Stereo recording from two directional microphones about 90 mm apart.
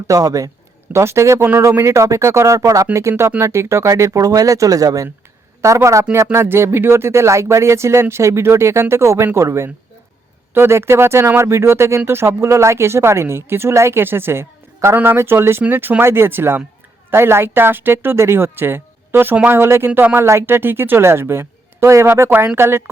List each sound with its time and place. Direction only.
0.1 s speech: 40° right (ahead or behind)